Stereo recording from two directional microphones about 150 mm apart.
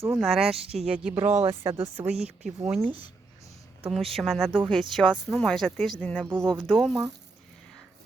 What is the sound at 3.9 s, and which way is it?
Speech, centre (ahead or behind).